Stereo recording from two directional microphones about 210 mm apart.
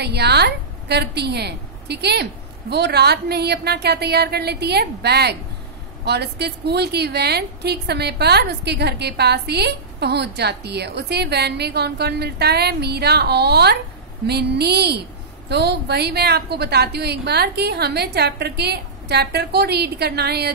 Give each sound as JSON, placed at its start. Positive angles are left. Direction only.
{"t": 0.0, "sound": "a woman's voice", "side_deg": -50}